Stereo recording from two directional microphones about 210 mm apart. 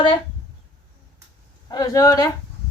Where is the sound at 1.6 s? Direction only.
15° left (ahead or behind).